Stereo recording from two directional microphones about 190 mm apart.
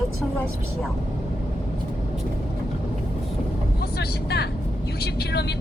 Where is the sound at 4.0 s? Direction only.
60° left (ahead or behind).